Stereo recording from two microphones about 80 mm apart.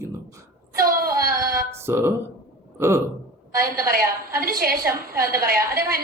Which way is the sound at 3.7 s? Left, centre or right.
Right.